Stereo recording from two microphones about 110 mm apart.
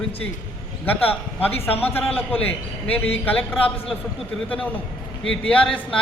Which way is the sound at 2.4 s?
15° left (ahead or behind).